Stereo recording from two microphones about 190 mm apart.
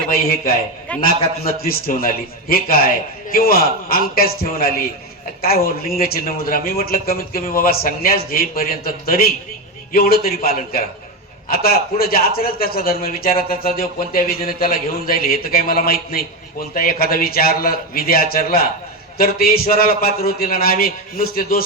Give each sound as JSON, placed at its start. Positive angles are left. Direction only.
{"t": 1.0, "sound": "a man's voice", "side_deg": 55}